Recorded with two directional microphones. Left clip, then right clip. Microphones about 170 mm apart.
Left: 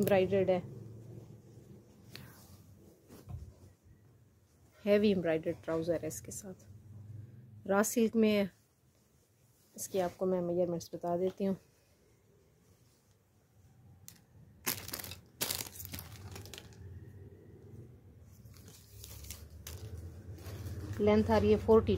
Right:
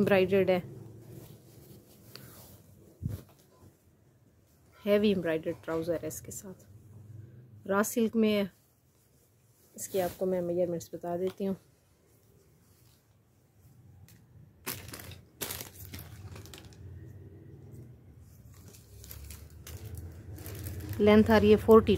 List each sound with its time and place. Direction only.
0.0 s speech: 20° right (ahead or behind)
4.8 s a woman's voice: centre (ahead or behind)
9.8 s a woman's voice: 5° left (ahead or behind)
14.6 s crushing: 45° left (ahead or behind)
19.0 s a sound: 20° left (ahead or behind)
21.0 s speech: 30° right (ahead or behind)